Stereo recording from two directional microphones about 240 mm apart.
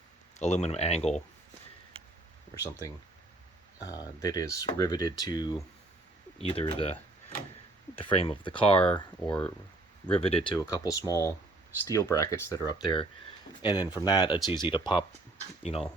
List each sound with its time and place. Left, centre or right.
0.3 s speech: left
2.6 s speech: centre
7.9 s speech: left
10.1 s speech: left